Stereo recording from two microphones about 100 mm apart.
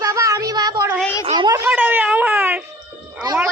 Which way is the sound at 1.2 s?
60° right (ahead or behind).